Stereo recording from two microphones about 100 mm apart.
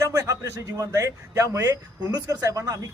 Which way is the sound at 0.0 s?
35° right (ahead or behind).